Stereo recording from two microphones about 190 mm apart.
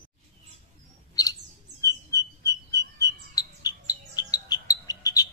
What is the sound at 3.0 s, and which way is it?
Bird, 20° left (ahead or behind).